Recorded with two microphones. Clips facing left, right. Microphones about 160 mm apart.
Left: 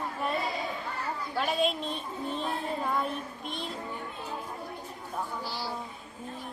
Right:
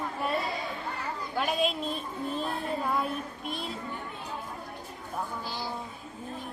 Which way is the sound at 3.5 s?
5° right (ahead or behind).